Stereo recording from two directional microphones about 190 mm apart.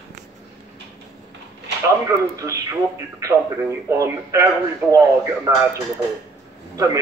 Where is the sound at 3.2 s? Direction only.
15° right (ahead or behind).